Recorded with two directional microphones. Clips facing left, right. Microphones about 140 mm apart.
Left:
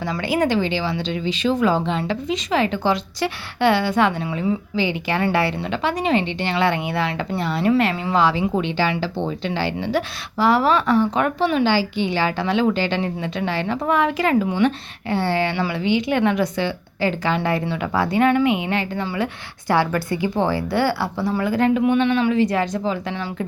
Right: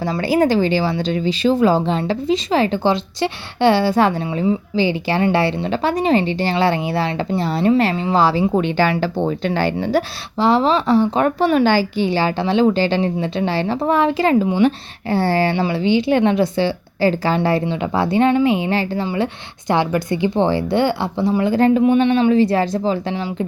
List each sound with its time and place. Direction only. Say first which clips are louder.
0.0 s speech: right 4 dB; 35° right (ahead or behind)
10.3 s a woman's voice: right 2 dB; 25° right (ahead or behind)
11.3 s speech: right 4 dB; 45° right (ahead or behind); by 14.7 s 30° right (ahead or behind)
15.1 s a woman's voice: right 4 dB; 40° right (ahead or behind)